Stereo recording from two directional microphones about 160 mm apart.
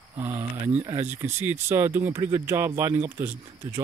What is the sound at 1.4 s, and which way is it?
Speech, 15° right (ahead or behind).